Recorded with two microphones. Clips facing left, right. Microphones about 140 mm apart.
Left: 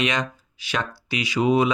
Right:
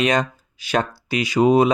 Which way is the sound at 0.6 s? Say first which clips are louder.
Right 6 dB; 45° right (ahead or behind).